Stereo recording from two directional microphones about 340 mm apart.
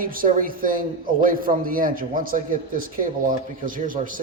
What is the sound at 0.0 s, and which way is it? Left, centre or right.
A man's voice, right.